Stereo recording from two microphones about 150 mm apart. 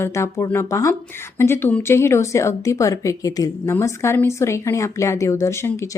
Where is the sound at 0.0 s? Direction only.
20° left (ahead or behind).